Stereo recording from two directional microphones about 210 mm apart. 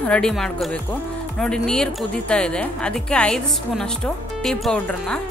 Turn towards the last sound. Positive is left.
turn(degrees=0)  # may be behind; listen again after turning